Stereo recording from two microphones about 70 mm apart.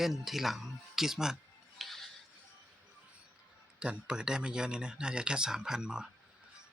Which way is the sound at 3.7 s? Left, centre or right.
Centre.